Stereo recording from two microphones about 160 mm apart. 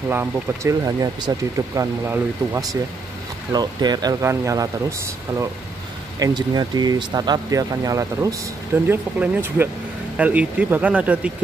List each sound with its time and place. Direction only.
0.1 s speech: 15° right (ahead or behind)
6.1 s speech: 25° right (ahead or behind); by 11.3 s 10° right (ahead or behind)